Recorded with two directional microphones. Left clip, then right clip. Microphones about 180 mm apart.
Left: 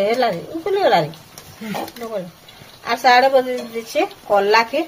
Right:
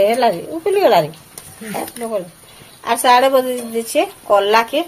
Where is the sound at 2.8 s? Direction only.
35° right (ahead or behind).